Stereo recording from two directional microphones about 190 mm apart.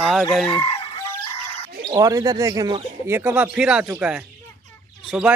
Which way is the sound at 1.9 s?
20° right (ahead or behind).